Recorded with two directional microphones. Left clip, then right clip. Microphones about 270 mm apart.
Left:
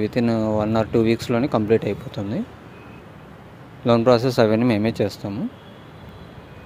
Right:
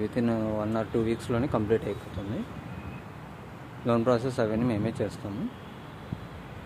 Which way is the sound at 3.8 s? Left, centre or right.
Left.